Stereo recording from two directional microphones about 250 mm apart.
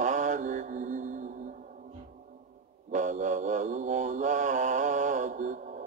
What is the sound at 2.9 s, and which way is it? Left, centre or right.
Mantra, right.